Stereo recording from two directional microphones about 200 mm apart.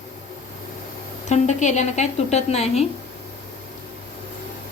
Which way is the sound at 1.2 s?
35° left (ahead or behind).